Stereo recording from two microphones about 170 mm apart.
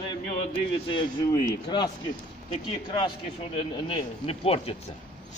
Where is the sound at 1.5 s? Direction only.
25° left (ahead or behind).